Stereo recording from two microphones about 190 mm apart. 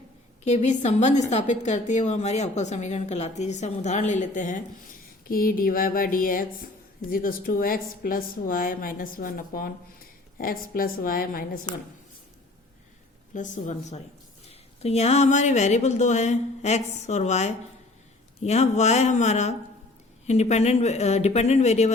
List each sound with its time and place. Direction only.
0.4 s a woman's voice: 35° left (ahead or behind)
13.3 s a woman's voice: 40° left (ahead or behind)